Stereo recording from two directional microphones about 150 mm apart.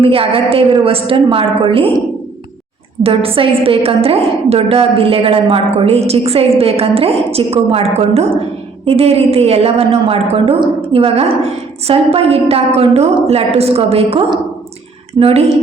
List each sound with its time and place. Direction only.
0.0 s a woman's voice: 40° right (ahead or behind)
3.0 s a woman's voice: 40° right (ahead or behind)